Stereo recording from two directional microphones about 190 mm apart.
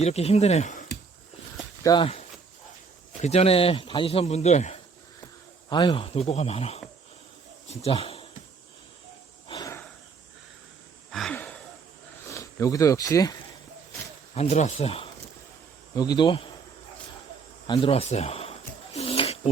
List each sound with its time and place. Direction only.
0.0 s speech: 35° left (ahead or behind)
1.8 s speech: 20° left (ahead or behind)
3.2 s speech: 35° left (ahead or behind)
5.6 s a man's voice: 25° left (ahead or behind)
9.5 s a sound: 20° left (ahead or behind)
11.1 s a sound: 5° left (ahead or behind)
12.2 s speech: 15° left (ahead or behind)
14.3 s speech: 35° left (ahead or behind)
17.7 s speech: 30° left (ahead or behind)
18.9 s bird: 30° left (ahead or behind)